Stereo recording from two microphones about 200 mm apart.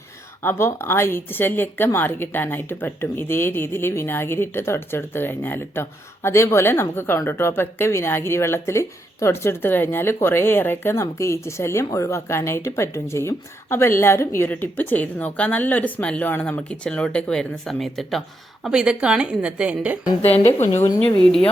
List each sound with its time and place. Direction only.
0.4 s a woman's voice: 10° left (ahead or behind); by 20.0 s 5° right (ahead or behind)
20.2 s speech: 30° left (ahead or behind)
20.7 s a woman's voice: 10° left (ahead or behind)